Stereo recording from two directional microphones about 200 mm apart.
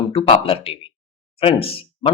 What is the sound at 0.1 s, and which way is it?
Speech, 25° left (ahead or behind).